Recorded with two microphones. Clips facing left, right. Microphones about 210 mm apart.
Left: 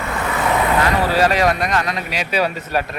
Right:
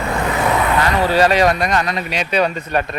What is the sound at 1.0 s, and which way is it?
Speech, centre (ahead or behind).